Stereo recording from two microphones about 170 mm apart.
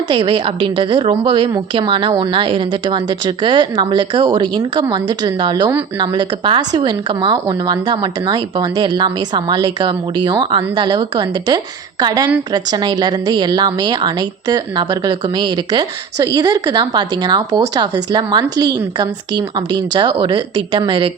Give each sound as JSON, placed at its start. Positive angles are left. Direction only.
{"t": 0.1, "sound": "speech", "side_deg": -30}